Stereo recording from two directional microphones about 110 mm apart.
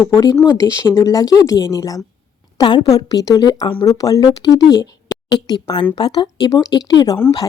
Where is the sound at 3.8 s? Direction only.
30° left (ahead or behind).